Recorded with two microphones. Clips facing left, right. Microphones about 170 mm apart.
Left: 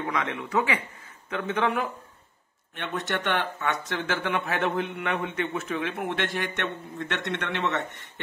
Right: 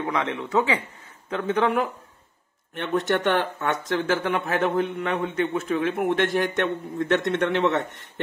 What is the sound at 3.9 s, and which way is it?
Speech, 40° right (ahead or behind).